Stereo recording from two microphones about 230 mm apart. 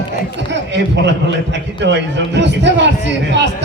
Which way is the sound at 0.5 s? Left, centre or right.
Right.